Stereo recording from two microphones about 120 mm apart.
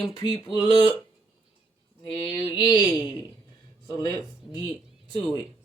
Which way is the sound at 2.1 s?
45° left (ahead or behind).